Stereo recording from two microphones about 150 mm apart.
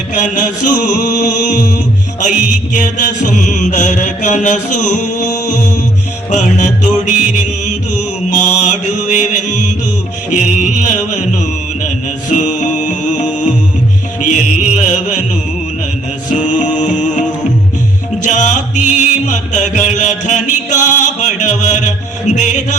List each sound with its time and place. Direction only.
0.2 s mantra: 60° left (ahead or behind)
2.7 s mantra: 60° left (ahead or behind)
6.3 s music: 55° left (ahead or behind)
7.0 s mantra: 55° left (ahead or behind)
8.3 s music: 55° left (ahead or behind)
16.3 s music: 55° left (ahead or behind)